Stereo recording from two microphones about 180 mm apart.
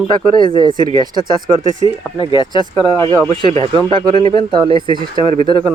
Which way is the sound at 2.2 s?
25° left (ahead or behind).